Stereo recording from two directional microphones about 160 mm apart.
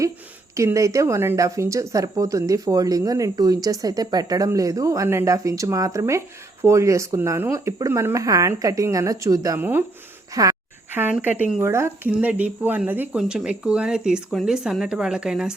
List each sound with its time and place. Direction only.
0.5 s speech: 20° right (ahead or behind)